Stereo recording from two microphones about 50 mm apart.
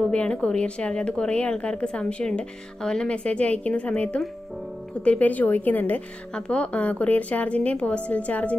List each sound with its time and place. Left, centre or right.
0.1 s a woman's voice: left
5.2 s a woman's voice: left
6.3 s a woman's voice: left